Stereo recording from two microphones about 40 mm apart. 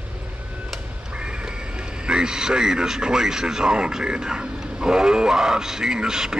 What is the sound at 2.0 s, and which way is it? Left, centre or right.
Speech, centre.